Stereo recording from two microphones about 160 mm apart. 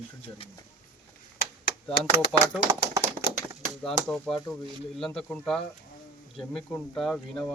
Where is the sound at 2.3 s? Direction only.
Centre (ahead or behind).